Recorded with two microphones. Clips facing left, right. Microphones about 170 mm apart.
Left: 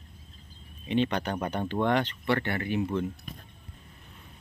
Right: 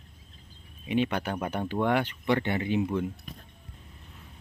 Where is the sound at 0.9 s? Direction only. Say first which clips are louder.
Even; 10° right (ahead or behind).